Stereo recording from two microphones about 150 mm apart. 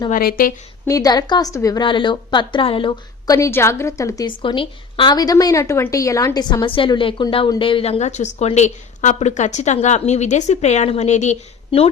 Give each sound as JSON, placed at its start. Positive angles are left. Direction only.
{"t": 0.1, "sound": "a woman's voice", "side_deg": 75}
{"t": 0.9, "sound": "a woman's voice", "side_deg": 25}